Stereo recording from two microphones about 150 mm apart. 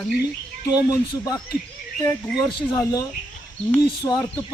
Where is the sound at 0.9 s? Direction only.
20° left (ahead or behind).